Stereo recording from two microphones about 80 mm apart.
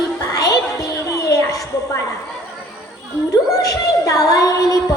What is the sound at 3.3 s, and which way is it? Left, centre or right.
Child singing, left.